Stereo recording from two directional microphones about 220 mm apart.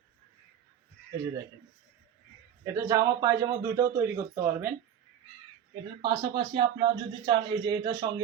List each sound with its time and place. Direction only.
2.7 s a man's voice: 15° right (ahead or behind)
6.0 s speech: 25° right (ahead or behind)